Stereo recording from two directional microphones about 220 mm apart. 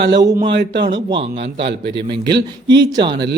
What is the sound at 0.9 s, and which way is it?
Speech, 20° right (ahead or behind).